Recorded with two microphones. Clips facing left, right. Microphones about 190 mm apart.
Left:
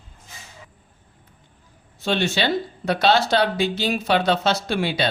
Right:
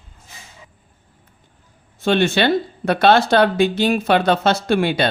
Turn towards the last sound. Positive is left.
turn(degrees=-55)  # may be behind; listen again after turning